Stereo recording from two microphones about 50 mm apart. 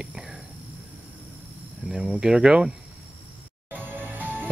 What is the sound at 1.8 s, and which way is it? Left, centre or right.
Speech, centre.